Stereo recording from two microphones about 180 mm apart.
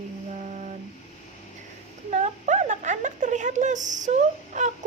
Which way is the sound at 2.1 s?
40° right (ahead or behind).